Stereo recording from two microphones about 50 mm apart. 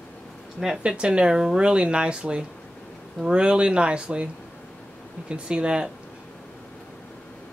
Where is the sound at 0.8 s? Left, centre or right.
Centre.